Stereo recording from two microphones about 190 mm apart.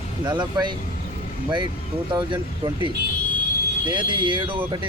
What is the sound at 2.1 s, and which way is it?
Speech, 25° right (ahead or behind).